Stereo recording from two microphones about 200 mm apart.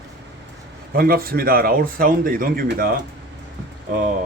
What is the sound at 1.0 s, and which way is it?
Speech, 50° right (ahead or behind).